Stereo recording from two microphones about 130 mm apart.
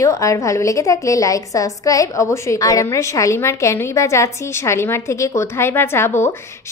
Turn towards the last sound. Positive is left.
turn(degrees=20)  # may be behind; listen again after turning